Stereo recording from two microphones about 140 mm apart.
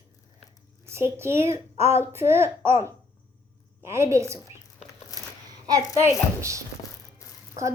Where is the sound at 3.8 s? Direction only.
20° right (ahead or behind).